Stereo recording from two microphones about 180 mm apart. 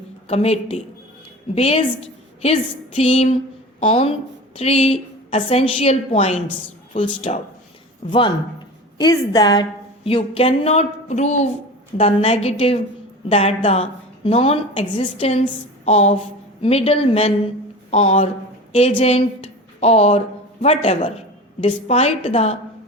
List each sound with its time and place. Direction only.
0.3 s a woman's voice: 35° left (ahead or behind)